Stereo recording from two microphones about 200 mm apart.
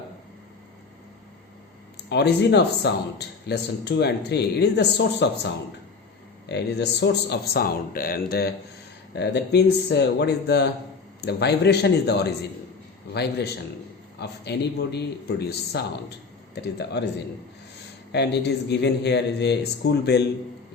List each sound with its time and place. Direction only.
2.0 s speech: 55° left (ahead or behind)
6.5 s speech: 55° left (ahead or behind)
14.2 s speech: 55° left (ahead or behind)
18.1 s speech: 55° left (ahead or behind)